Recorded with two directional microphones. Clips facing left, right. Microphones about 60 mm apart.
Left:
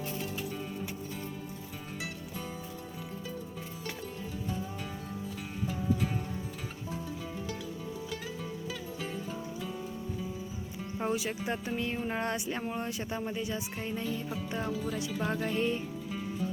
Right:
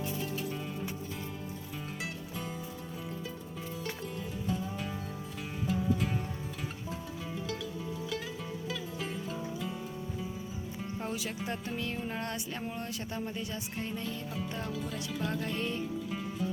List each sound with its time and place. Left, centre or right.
10.9 s speech: centre